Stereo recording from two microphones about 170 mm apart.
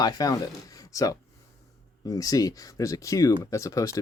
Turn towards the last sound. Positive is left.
turn(degrees=20)  # may be behind; listen again after turning